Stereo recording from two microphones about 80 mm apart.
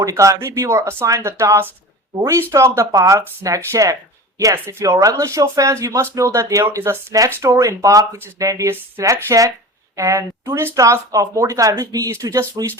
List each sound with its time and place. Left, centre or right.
0.0 s speech: right
4.5 s speech: right
8.7 s speech: right
10.8 s speech: right